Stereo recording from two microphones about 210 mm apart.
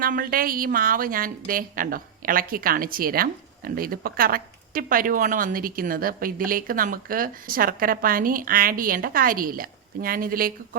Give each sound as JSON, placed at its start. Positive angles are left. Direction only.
{"t": 0.0, "sound": "a woman's voice", "side_deg": -40}